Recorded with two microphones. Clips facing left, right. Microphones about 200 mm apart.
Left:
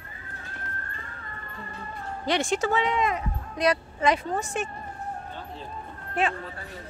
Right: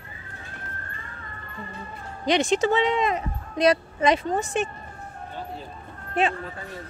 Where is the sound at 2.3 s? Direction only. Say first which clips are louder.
Right 4 dB; 20° right (ahead or behind).